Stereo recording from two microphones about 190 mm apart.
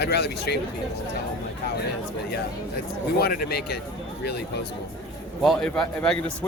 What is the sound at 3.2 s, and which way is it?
Speech, 50° left (ahead or behind).